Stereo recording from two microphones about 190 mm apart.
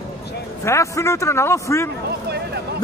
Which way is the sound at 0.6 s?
15° left (ahead or behind).